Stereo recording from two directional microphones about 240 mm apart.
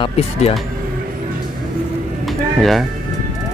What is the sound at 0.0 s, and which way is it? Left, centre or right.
Speech, left.